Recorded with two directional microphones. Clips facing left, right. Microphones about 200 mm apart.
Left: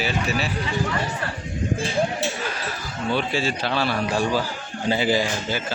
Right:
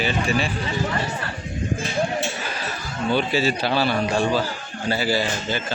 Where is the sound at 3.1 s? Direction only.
5° right (ahead or behind).